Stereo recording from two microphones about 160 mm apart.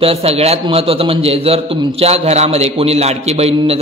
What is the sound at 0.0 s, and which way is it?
A man's voice, 40° right (ahead or behind).